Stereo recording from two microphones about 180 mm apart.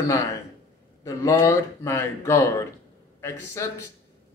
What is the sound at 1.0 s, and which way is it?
Speech, 15° left (ahead or behind).